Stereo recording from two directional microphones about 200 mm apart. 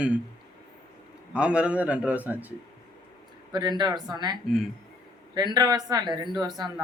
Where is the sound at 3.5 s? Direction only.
20° right (ahead or behind).